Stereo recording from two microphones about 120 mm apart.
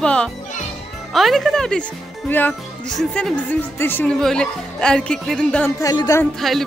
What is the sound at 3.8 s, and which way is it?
Speech, 15° left (ahead or behind).